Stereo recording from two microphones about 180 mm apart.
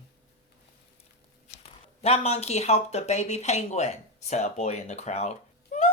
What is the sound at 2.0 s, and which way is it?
Speech, 35° left (ahead or behind).